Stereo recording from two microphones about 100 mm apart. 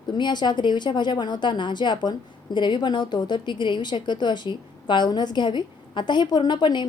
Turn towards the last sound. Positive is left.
turn(degrees=50)  # may be behind; listen again after turning